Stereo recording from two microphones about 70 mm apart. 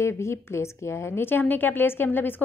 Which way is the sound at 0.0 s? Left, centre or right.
Left.